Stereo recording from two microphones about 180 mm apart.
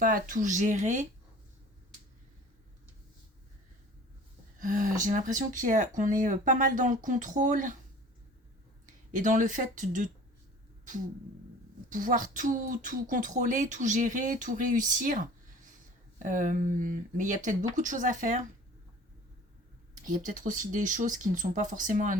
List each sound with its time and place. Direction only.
0.0 s speech: 50° right (ahead or behind)
4.6 s speech: 45° right (ahead or behind)
9.1 s speech: 45° right (ahead or behind)
11.9 s speech: 50° right (ahead or behind)
20.0 s speech: 45° right (ahead or behind)